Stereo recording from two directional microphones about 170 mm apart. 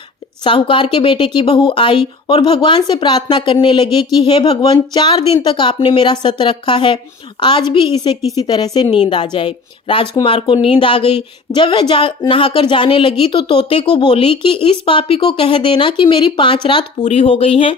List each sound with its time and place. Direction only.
0.4 s speech: 30° left (ahead or behind)